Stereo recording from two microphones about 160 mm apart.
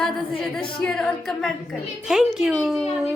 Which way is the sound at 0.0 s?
Centre (ahead or behind).